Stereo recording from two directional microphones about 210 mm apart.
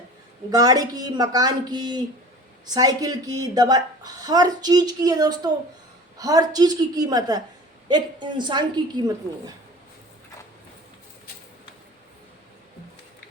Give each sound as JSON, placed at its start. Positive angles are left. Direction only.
{"t": 0.5, "sound": "a woman's voice", "side_deg": -15}